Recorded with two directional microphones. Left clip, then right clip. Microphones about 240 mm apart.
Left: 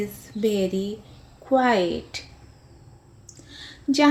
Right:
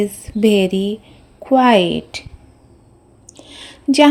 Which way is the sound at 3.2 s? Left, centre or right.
Right.